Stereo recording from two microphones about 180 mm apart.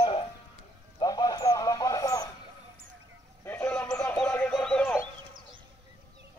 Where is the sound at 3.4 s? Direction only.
15° left (ahead or behind).